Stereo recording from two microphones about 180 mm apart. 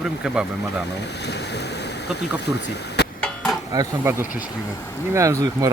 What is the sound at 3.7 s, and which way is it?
Speech, 15° right (ahead or behind).